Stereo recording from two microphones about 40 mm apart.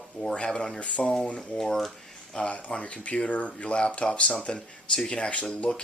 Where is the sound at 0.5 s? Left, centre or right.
Centre.